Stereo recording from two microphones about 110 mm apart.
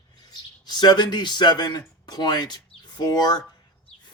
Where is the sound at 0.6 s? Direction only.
40° left (ahead or behind).